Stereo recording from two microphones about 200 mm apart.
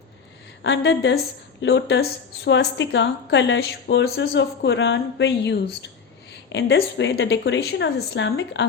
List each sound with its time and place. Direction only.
0.6 s a woman's voice: 65° left (ahead or behind)